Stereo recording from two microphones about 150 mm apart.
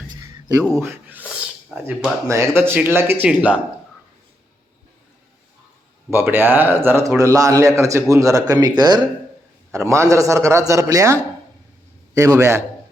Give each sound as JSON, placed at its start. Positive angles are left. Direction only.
{"t": 0.8, "sound": "a man's voice", "side_deg": -15}
{"t": 6.1, "sound": "a man's voice", "side_deg": -15}